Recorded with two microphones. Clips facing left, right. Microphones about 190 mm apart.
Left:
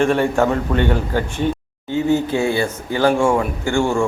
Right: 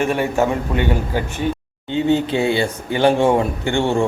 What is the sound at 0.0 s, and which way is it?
A man's voice, 10° right (ahead or behind).